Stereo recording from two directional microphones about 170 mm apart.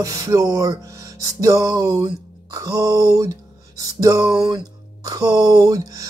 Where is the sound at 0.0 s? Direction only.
20° right (ahead or behind).